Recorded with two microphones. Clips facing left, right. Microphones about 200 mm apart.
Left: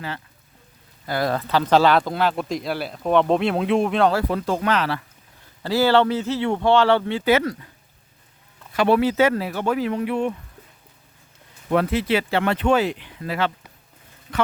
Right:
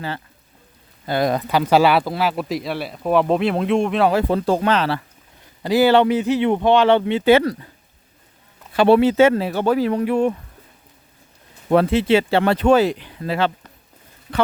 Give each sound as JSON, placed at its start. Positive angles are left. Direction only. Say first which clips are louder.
{"t": 1.0, "sound": "speech", "louder": "right 4 dB", "side_deg": -20}
{"t": 4.1, "sound": "speech", "louder": "right 4 dB", "side_deg": -25}
{"t": 5.6, "sound": "speech", "louder": "right 3 dB", "side_deg": -15}
{"t": 8.7, "sound": "speech", "louder": "right 5 dB", "side_deg": -30}
{"t": 11.7, "sound": "speech", "louder": "right 5 dB", "side_deg": -30}